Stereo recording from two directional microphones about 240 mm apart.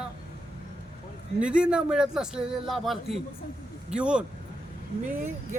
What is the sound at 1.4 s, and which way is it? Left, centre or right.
A man's voice, centre.